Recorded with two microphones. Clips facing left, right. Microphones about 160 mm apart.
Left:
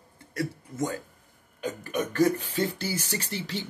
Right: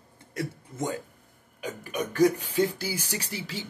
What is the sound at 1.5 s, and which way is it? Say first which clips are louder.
Speech: left 2 dB; 10° right (ahead or behind).